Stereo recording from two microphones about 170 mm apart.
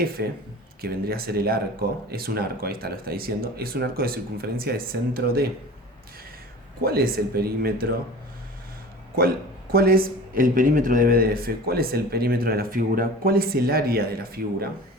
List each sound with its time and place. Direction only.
0.2 s speech: 75° right (ahead or behind)
0.8 s speech: 60° right (ahead or behind)
6.8 s speech: 65° right (ahead or behind)
9.7 s speech: 60° right (ahead or behind)